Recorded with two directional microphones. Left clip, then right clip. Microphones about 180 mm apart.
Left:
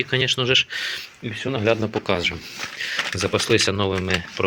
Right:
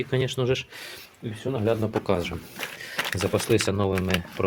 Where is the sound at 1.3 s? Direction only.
15° left (ahead or behind).